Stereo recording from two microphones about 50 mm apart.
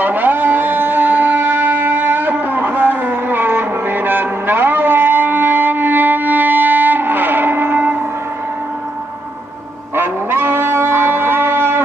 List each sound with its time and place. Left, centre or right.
0.0 s music: right
9.9 s music: right